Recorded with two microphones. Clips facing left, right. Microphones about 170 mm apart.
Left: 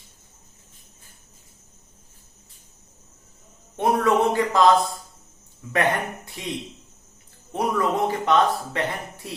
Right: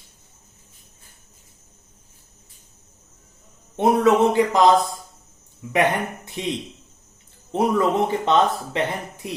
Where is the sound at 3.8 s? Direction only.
20° right (ahead or behind).